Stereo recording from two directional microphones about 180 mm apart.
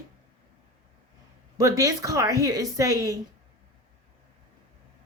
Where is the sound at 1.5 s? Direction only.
20° right (ahead or behind).